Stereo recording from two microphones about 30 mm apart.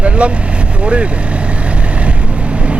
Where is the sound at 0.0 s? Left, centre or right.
Right.